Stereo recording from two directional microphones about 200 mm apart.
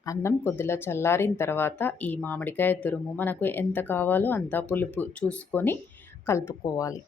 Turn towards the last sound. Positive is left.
turn(degrees=15)  # may be behind; listen again after turning